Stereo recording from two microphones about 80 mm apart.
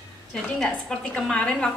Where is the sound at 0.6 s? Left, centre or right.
Centre.